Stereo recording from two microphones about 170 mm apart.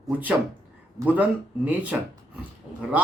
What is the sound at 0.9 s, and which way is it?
Speech, 10° right (ahead or behind).